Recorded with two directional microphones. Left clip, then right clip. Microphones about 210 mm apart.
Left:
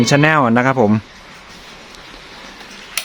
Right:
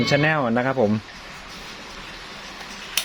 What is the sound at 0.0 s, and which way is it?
Speech, 30° left (ahead or behind).